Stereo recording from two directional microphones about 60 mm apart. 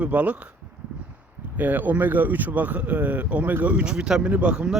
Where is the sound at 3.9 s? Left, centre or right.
Centre.